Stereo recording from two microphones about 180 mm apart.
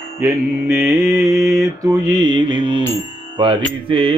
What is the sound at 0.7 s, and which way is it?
Mantra, centre (ahead or behind).